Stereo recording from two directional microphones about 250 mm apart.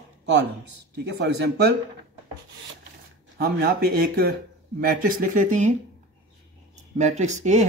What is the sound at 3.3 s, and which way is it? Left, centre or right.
Speech, right.